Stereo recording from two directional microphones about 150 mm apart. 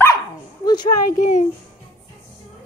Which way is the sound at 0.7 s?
25° left (ahead or behind).